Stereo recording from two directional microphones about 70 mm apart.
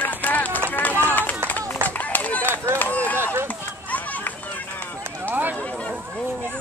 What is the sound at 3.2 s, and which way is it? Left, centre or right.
Run, right.